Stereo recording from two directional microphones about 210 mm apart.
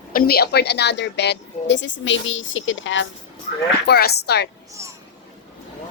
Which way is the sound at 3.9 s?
50° left (ahead or behind).